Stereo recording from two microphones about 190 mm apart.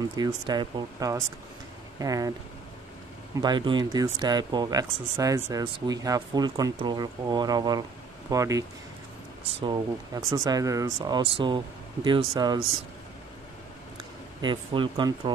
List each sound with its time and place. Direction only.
0.1 s speech: 20° right (ahead or behind)
3.3 s speech: 25° right (ahead or behind)
14.4 s speech: 25° right (ahead or behind)